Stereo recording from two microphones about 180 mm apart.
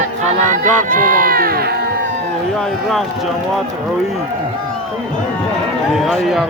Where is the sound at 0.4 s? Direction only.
45° right (ahead or behind).